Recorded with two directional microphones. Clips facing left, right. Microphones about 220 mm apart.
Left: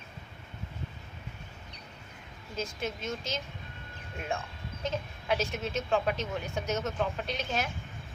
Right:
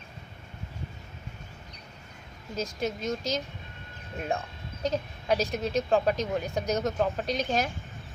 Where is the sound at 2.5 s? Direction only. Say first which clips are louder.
Right 4 dB; 40° right (ahead or behind).